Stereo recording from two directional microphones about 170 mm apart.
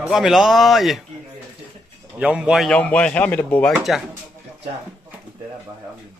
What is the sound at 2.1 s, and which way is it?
Speech, 5° right (ahead or behind).